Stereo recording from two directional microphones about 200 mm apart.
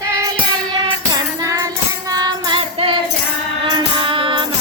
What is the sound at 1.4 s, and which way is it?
Music, 15° right (ahead or behind).